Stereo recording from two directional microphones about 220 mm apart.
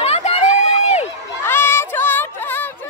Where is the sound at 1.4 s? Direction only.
10° left (ahead or behind).